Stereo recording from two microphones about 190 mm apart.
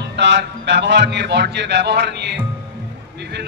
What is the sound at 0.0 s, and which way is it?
Speech, 65° right (ahead or behind).